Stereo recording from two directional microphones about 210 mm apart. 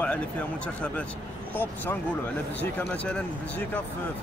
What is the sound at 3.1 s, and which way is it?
Speech, 5° left (ahead or behind).